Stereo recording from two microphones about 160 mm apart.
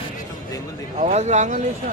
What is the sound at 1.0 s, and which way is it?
Speech, 45° right (ahead or behind).